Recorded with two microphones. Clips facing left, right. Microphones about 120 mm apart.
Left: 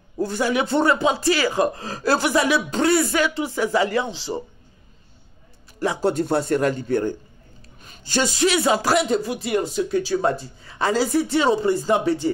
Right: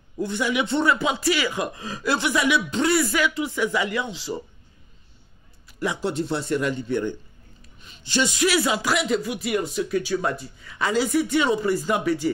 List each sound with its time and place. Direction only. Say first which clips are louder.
0.2 s speech: left 3 dB; 40° left (ahead or behind)
5.8 s speech: left 4 dB; 35° left (ahead or behind)
7.8 s a sound: left 1 dB; 45° left (ahead or behind)
8.5 s speech: left 5 dB; 25° left (ahead or behind)